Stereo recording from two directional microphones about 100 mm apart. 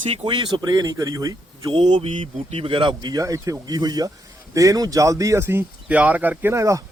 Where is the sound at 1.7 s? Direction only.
60° right (ahead or behind).